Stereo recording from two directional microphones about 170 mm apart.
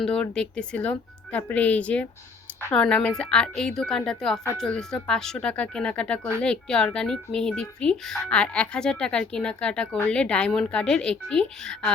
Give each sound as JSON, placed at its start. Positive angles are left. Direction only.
{"t": 0.0, "sound": "speech", "side_deg": 5}
{"t": 2.8, "sound": "speech", "side_deg": 5}